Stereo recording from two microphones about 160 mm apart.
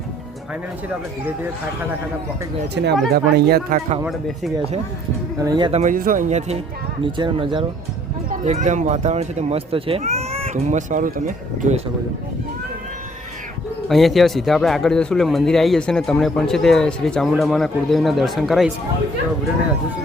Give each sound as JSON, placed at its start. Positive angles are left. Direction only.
{"t": 2.8, "sound": "speech", "side_deg": -90}
{"t": 4.0, "sound": "speech", "side_deg": 0}
{"t": 5.4, "sound": "speech", "side_deg": -25}
{"t": 5.7, "sound": "speech", "side_deg": -55}
{"t": 7.0, "sound": "speech", "side_deg": -30}
{"t": 8.4, "sound": "speech", "side_deg": -50}
{"t": 13.8, "sound": "speech", "side_deg": 0}